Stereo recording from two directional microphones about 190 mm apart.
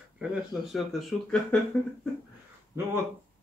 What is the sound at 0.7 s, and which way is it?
Speech, centre (ahead or behind).